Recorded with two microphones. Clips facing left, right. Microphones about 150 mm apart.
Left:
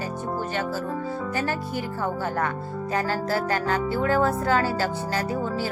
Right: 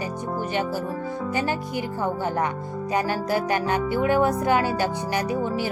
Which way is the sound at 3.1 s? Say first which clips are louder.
Right 1 dB; 20° right (ahead or behind).